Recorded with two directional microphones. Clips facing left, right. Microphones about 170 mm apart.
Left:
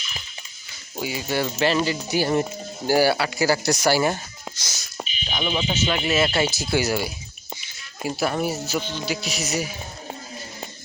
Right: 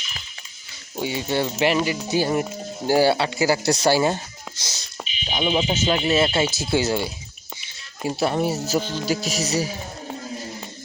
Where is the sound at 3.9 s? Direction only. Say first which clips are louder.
Right 1 dB; 20° right (ahead or behind).